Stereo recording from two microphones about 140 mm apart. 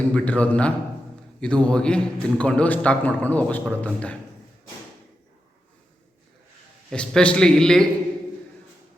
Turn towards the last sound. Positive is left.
turn(degrees=5)  # may be behind; listen again after turning